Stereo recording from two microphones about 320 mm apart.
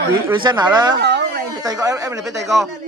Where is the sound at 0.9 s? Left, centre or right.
Right.